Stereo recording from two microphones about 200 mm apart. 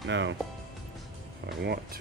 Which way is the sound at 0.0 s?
65° right (ahead or behind).